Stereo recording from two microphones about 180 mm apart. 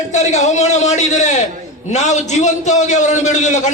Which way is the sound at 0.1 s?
40° left (ahead or behind).